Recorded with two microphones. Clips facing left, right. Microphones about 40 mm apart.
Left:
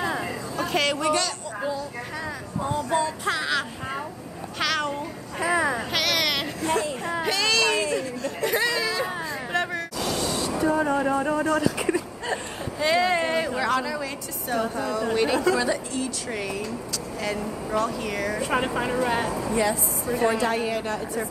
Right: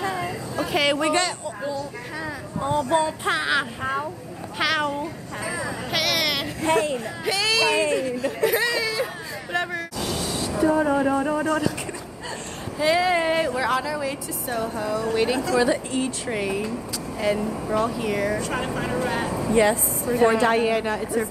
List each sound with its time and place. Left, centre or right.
0.0 s music: centre
0.6 s a sound: centre
1.6 s speech: centre
2.7 s speech: right
4.6 s cat: centre
5.4 s a sound: left
5.9 s a sound: centre
8.2 s hubbub: centre
12.7 s a woman's voice: centre
18.4 s a woman's voice: centre
19.5 s speech: right
20.2 s speech: centre
20.4 s speech: right
20.8 s speech: centre